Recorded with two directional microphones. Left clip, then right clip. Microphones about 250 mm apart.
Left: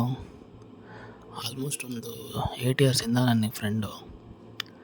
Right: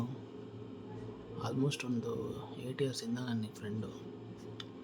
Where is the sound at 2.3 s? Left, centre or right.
Left.